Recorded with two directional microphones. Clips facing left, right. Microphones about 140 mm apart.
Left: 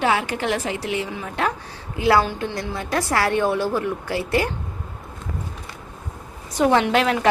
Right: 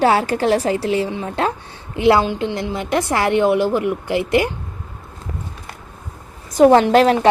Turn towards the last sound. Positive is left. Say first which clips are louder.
# right 6 dB
turn(degrees=-35)  # may be behind; listen again after turning